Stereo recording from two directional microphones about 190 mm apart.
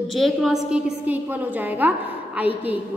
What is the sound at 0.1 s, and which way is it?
A woman's voice, centre (ahead or behind).